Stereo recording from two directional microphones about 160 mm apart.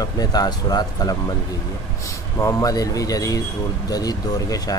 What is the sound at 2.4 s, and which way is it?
Speech, 20° left (ahead or behind).